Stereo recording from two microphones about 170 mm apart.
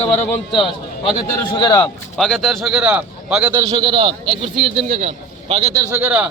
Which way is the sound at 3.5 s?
25° right (ahead or behind).